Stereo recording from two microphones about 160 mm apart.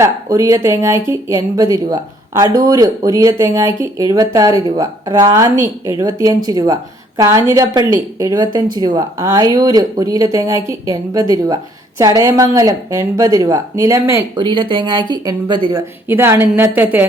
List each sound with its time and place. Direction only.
0.0 s speech: 20° right (ahead or behind)
14.3 s speech: 30° right (ahead or behind)
16.0 s a woman's voice: 15° right (ahead or behind)